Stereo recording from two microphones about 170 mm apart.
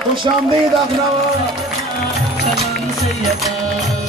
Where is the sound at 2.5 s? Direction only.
Centre (ahead or behind).